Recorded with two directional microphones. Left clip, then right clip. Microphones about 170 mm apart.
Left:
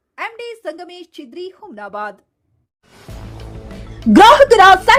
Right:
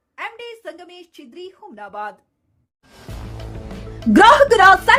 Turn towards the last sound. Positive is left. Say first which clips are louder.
# left 3 dB
turn(degrees=15)  # may be behind; listen again after turning